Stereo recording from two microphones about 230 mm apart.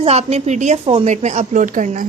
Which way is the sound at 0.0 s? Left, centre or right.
Right.